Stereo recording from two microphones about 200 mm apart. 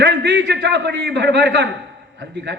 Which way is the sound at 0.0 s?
60° right (ahead or behind).